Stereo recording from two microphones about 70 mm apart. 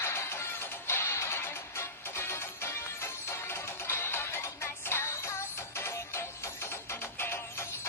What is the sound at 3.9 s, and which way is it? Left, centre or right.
Music, left.